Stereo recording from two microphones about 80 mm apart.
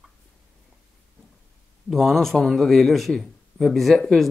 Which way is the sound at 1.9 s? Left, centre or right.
Centre.